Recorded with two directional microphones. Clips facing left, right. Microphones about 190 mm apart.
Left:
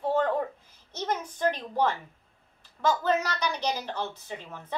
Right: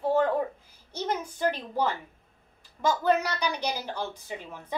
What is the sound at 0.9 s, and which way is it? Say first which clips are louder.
A woman's voice: right 1 dB; 10° right (ahead or behind).